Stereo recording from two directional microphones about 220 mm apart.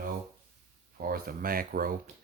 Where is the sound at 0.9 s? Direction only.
40° right (ahead or behind).